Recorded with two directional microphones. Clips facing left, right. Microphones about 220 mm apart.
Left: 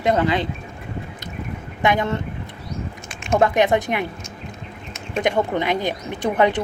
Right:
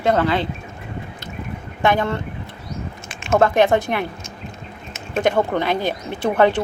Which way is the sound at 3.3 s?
15° left (ahead or behind).